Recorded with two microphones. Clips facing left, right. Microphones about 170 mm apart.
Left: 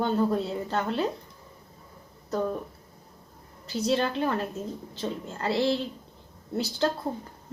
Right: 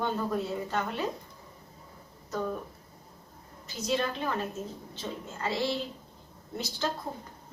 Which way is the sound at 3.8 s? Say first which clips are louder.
Left 4 dB; 35° left (ahead or behind).